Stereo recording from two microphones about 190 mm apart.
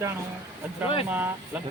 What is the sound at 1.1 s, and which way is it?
Speech, 10° right (ahead or behind).